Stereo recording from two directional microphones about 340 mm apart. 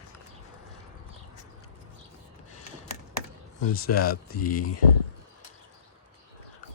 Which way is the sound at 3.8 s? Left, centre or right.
Left.